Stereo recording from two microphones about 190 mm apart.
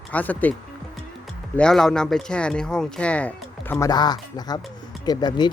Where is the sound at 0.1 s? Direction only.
10° left (ahead or behind).